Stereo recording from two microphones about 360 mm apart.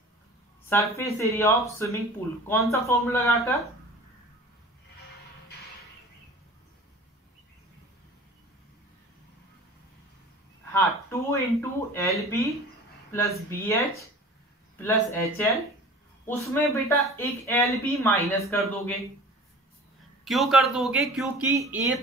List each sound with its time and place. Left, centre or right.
0.7 s speech: centre
10.7 s speech: centre
14.8 s speech: centre
20.2 s speech: centre